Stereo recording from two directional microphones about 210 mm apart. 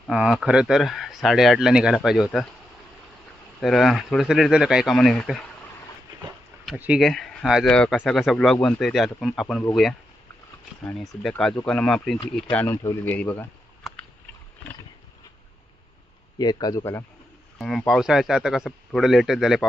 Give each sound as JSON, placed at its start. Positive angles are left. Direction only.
{"t": 0.1, "sound": "speech", "side_deg": 0}
{"t": 3.6, "sound": "speech", "side_deg": 0}
{"t": 6.7, "sound": "speech", "side_deg": -5}
{"t": 10.8, "sound": "speech", "side_deg": 0}
{"t": 16.4, "sound": "speech", "side_deg": 20}
{"t": 17.6, "sound": "speech", "side_deg": 0}